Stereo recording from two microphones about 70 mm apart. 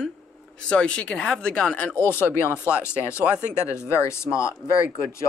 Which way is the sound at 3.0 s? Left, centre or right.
Left.